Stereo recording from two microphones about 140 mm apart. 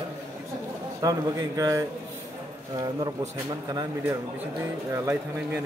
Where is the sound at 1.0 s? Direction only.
25° right (ahead or behind).